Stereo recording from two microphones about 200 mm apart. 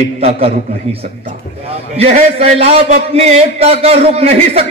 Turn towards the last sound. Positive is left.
turn(degrees=-30)  # may be behind; listen again after turning